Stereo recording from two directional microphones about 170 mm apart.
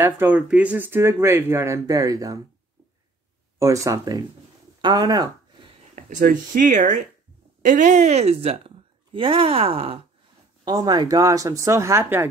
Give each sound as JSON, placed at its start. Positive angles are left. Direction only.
{"t": 0.0, "sound": "speech", "side_deg": -10}
{"t": 3.5, "sound": "speech", "side_deg": -20}
{"t": 5.9, "sound": "a woman's voice", "side_deg": -50}
{"t": 10.6, "sound": "speech", "side_deg": -25}